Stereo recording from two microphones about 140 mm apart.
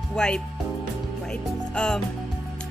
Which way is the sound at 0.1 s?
5° left (ahead or behind).